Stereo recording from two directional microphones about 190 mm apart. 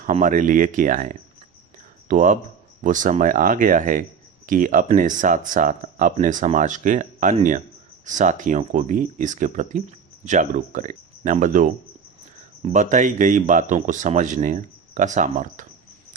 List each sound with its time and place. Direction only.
0.0 s speech: 45° right (ahead or behind)